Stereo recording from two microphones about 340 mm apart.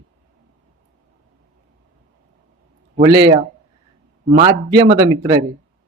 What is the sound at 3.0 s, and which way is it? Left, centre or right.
Speech, centre.